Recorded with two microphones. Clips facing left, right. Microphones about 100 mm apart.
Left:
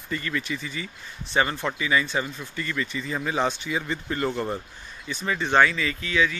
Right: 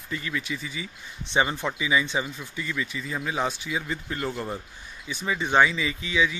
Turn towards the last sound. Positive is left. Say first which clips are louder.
# left 1 dB
turn(degrees=-15)  # may be behind; listen again after turning